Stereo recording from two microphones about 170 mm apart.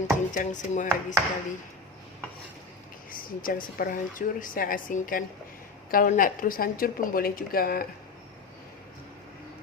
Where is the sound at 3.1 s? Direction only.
55° left (ahead or behind).